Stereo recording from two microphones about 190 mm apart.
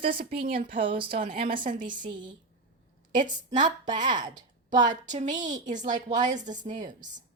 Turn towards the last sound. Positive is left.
turn(degrees=-40)  # may be behind; listen again after turning